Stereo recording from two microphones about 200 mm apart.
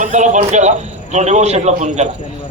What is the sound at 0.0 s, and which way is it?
A man's voice, 35° right (ahead or behind).